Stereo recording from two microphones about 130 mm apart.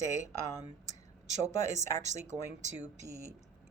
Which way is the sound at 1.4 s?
60° right (ahead or behind).